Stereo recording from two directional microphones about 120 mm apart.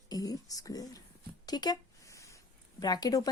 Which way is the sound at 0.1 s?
30° left (ahead or behind).